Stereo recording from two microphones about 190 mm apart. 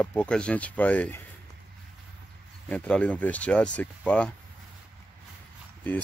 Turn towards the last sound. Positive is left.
turn(degrees=10)  # may be behind; listen again after turning